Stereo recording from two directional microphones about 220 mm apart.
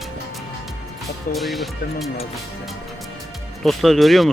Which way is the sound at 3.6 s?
Centre (ahead or behind).